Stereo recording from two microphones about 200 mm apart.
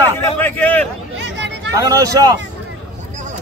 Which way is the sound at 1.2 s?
60° right (ahead or behind).